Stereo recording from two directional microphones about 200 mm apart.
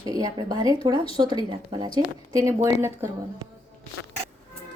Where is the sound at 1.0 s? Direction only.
25° left (ahead or behind).